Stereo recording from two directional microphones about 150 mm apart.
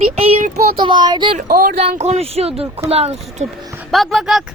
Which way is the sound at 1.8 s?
45° right (ahead or behind).